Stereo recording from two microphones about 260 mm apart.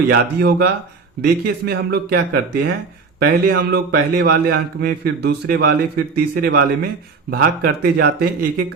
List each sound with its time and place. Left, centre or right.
0.1 s a man's voice: right